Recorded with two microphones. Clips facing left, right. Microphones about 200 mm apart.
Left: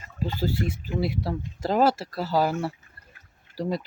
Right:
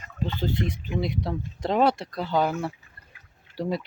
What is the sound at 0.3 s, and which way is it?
Speech, 5° left (ahead or behind).